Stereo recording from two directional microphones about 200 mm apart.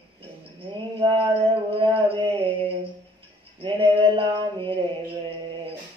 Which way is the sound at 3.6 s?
25° right (ahead or behind).